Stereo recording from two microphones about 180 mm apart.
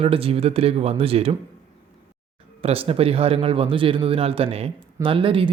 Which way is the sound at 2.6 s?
30° right (ahead or behind).